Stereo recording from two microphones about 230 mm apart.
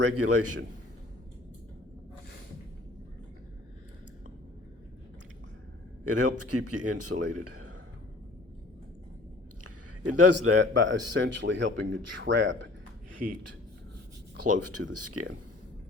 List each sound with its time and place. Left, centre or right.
0.1 s speech: right
6.1 s speech: right
9.6 s a sound: right
10.6 s speech: right
13.2 s speech: right
14.4 s speech: right